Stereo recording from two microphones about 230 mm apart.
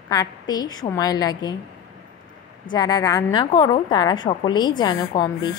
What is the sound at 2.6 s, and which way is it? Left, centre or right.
A woman's voice, centre.